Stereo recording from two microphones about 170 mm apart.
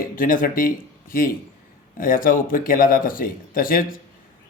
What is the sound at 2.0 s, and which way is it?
Speech, 55° left (ahead or behind).